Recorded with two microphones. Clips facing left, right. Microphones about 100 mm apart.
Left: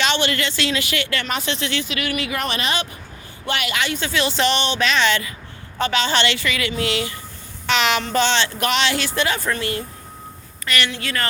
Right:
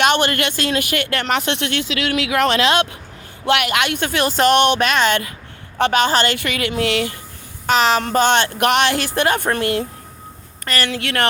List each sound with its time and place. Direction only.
0.0 s speech: 50° right (ahead or behind); by 3.0 s 85° right
3.4 s speech: 65° right (ahead or behind)
7.7 s child singing: 40° right (ahead or behind)
8.0 s speech: 50° right (ahead or behind)
10.7 s child singing: 40° right (ahead or behind)
10.9 s speech: 70° right (ahead or behind)